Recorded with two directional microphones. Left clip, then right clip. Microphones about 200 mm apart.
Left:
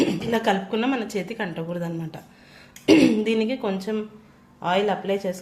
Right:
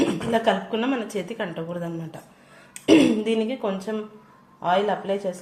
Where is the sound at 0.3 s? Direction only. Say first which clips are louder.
Right 1 dB; 40° left (ahead or behind).